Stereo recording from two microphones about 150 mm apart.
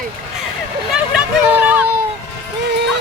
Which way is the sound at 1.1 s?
10° right (ahead or behind).